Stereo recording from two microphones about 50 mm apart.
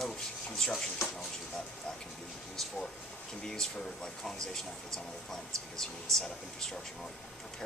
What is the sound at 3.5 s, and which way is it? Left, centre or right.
Speech, centre.